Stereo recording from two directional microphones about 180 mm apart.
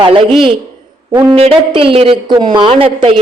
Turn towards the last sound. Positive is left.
turn(degrees=-30)  # may be behind; listen again after turning